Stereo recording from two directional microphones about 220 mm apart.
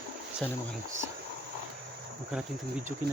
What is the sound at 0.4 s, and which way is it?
Speech, 5° left (ahead or behind).